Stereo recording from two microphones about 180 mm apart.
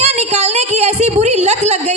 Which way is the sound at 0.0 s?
35° right (ahead or behind).